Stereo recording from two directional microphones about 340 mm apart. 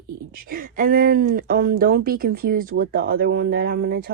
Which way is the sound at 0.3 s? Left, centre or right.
Right.